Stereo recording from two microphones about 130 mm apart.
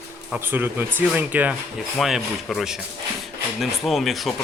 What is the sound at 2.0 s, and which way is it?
Speech, centre (ahead or behind).